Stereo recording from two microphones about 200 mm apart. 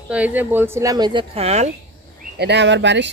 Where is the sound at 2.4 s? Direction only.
60° right (ahead or behind).